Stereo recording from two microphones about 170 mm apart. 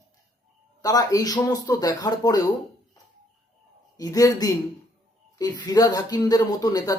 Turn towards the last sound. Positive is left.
turn(degrees=20)  # may be behind; listen again after turning